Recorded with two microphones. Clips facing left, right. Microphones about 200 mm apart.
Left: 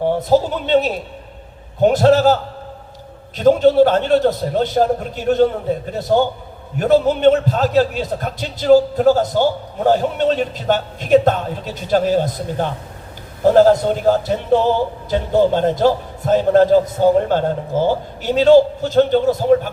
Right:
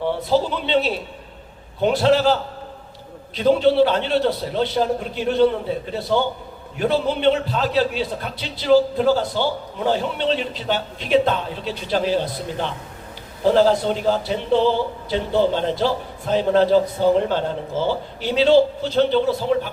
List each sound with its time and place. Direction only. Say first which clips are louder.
0.0 s a man's voice: left 5 dB; 45° left (ahead or behind)